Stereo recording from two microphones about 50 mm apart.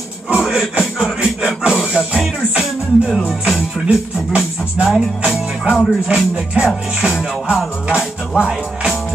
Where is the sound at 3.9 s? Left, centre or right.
Centre.